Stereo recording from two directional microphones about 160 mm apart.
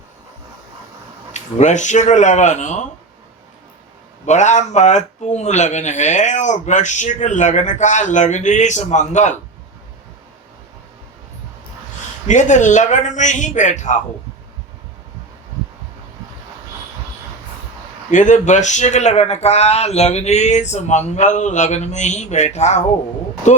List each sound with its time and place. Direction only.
1.3 s speech: 45° left (ahead or behind)
4.3 s speech: 45° left (ahead or behind)
12.3 s speech: 50° left (ahead or behind)
18.1 s speech: 50° left (ahead or behind)